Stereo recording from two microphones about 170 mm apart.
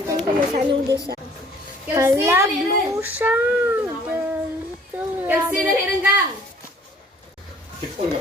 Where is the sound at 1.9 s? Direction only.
15° right (ahead or behind).